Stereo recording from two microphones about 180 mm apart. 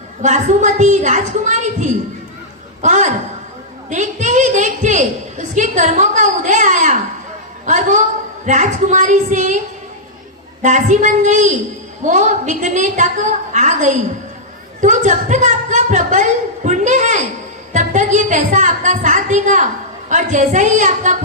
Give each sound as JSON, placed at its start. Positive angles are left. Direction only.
{"t": 0.2, "sound": "a woman's voice", "side_deg": -40}
{"t": 10.6, "sound": "a woman's voice", "side_deg": -45}